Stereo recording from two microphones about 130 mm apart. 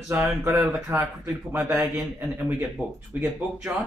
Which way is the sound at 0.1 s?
20° right (ahead or behind).